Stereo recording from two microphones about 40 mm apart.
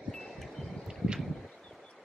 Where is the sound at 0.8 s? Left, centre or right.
Right.